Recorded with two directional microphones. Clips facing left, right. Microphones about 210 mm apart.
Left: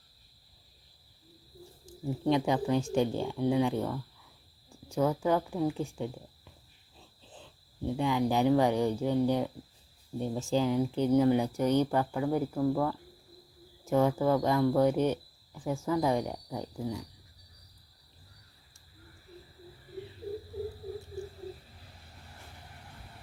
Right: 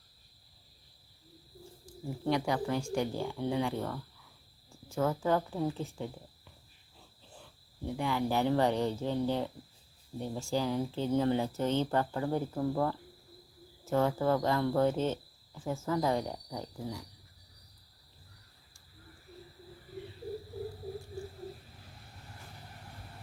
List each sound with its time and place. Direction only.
1.9 s speech: 20° left (ahead or behind)
7.3 s cricket: 20° left (ahead or behind)
7.9 s speech: 15° left (ahead or behind)
12.5 s speech: centre (ahead or behind)
13.8 s speech: 15° left (ahead or behind)